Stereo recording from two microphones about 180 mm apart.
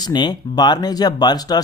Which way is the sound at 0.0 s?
25° left (ahead or behind).